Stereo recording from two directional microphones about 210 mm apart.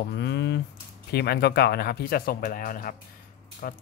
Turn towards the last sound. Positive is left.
turn(degrees=45)  # may be behind; listen again after turning